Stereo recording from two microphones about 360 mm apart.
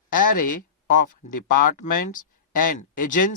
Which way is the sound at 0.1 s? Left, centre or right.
Left.